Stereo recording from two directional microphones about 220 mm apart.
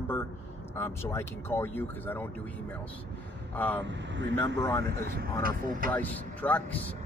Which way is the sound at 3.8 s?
55° right (ahead or behind).